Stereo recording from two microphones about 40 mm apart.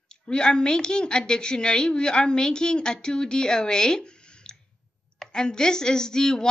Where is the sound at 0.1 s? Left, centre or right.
Left.